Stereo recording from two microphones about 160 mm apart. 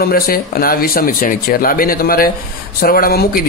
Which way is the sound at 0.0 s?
70° left (ahead or behind).